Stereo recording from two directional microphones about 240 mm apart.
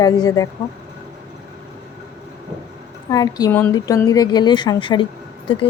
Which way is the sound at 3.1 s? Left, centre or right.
Centre.